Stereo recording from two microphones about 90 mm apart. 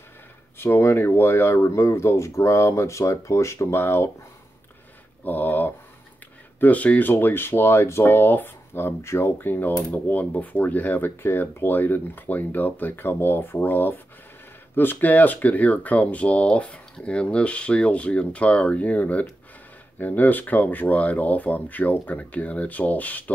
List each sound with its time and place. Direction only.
0.6 s speech: 25° left (ahead or behind)
5.2 s a sound: 20° left (ahead or behind)
6.6 s speech: 15° left (ahead or behind)